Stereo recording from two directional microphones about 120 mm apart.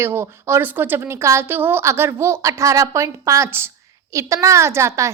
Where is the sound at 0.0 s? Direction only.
20° right (ahead or behind).